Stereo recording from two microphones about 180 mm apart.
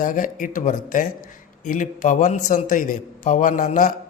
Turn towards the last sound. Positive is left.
turn(degrees=45)  # may be behind; listen again after turning